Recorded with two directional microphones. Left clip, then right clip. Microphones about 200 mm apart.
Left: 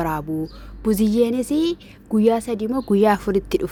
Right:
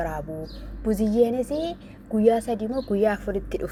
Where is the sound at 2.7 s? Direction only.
40° left (ahead or behind).